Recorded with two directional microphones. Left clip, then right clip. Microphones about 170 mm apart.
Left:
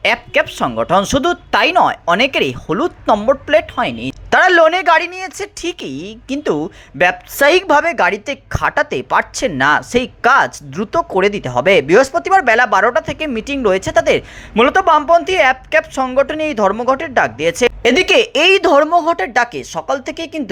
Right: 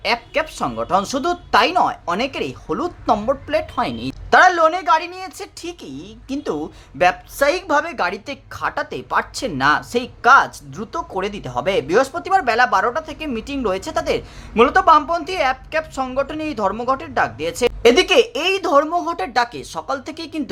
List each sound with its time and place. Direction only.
0.0 s a woman's voice: 20° left (ahead or behind)
4.3 s a woman's voice: 25° left (ahead or behind)
19.1 s speech: 10° left (ahead or behind)